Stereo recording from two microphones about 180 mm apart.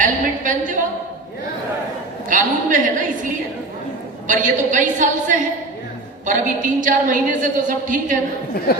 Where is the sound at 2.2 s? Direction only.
45° right (ahead or behind).